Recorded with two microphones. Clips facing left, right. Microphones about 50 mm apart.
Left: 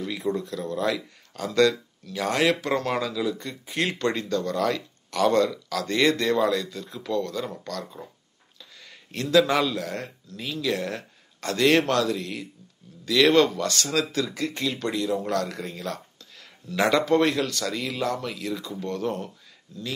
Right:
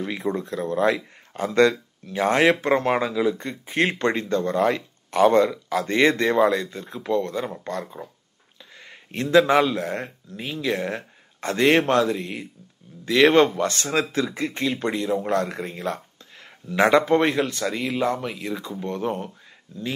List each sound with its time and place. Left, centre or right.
0.0 s speech: right